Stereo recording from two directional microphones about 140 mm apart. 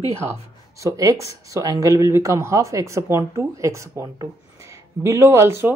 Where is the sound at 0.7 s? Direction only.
25° right (ahead or behind).